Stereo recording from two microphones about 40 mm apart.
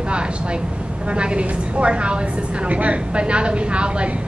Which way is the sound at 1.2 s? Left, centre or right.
Right.